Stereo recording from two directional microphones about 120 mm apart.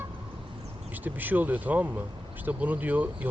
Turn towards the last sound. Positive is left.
turn(degrees=-15)  # may be behind; listen again after turning